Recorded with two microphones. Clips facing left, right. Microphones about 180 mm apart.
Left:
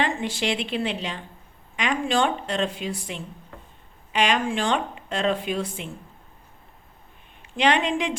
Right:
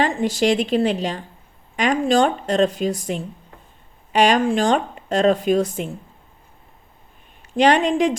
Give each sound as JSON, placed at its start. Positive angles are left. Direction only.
{"t": 0.0, "sound": "speech", "side_deg": -40}
{"t": 7.5, "sound": "speech", "side_deg": -40}